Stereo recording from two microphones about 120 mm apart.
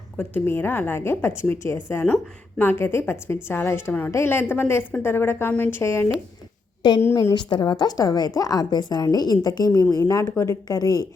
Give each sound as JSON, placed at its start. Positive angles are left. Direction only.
{"t": 0.2, "sound": "a woman's voice", "side_deg": 15}
{"t": 6.8, "sound": "a woman's voice", "side_deg": 35}